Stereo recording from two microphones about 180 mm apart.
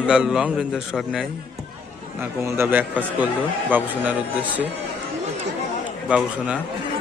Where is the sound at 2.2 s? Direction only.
15° right (ahead or behind).